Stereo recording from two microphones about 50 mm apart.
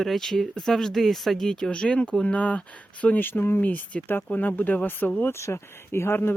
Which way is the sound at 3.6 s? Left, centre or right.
Left.